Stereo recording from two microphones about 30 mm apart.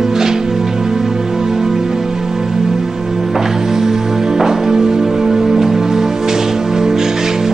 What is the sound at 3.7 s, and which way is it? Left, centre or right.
Music, centre.